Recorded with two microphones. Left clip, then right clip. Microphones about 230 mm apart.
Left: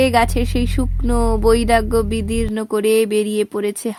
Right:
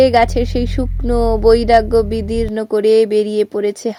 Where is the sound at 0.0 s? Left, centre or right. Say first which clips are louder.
Right 4 dB; left.